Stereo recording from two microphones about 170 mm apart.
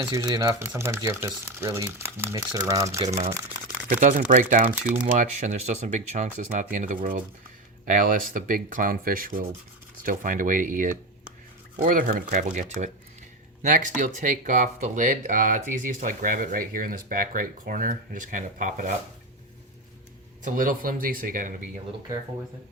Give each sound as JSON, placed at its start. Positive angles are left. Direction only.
{"t": 0.0, "sound": "speech", "side_deg": -25}
{"t": 3.8, "sound": "speech", "side_deg": -50}
{"t": 20.4, "sound": "speech", "side_deg": -55}